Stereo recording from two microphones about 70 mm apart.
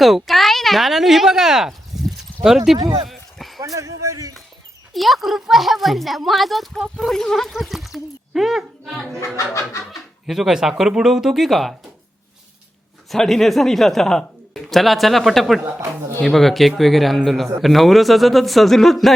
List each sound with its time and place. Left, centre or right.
0.0 s speech: centre
2.8 s a sound: centre
3.6 s a sound: right
4.9 s speech: centre
9.2 s speech: left
9.9 s speech: centre
13.1 s speech: centre